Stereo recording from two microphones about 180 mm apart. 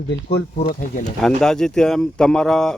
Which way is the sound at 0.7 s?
50° left (ahead or behind).